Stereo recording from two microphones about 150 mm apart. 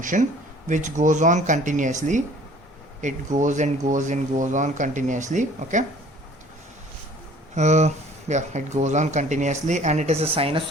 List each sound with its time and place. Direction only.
0.0 s speech: 60° right (ahead or behind)
7.5 s speech: 50° right (ahead or behind)